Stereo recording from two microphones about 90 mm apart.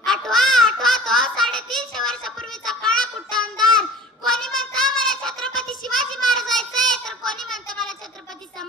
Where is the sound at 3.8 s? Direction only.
5° left (ahead or behind).